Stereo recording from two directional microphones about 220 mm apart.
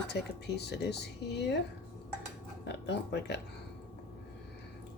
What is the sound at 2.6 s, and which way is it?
Speech, 50° left (ahead or behind).